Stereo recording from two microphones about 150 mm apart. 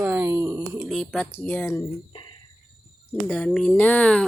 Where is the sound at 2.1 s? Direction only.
30° left (ahead or behind).